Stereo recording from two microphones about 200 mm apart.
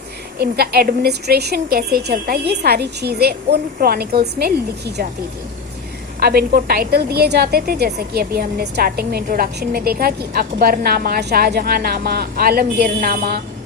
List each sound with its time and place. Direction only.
0.3 s a woman's voice: 50° right (ahead or behind)
6.1 s a woman's voice: 50° right (ahead or behind)